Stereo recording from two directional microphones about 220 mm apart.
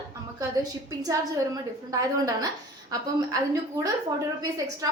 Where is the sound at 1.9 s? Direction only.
15° right (ahead or behind).